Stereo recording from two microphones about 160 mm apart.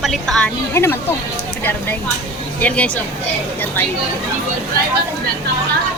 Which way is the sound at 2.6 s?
10° left (ahead or behind).